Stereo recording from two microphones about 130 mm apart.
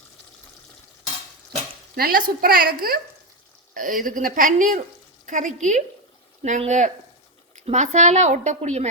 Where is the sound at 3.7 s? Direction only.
90° right.